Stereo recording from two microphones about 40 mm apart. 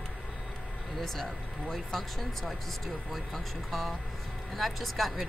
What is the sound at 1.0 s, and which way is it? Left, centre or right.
Speech, centre.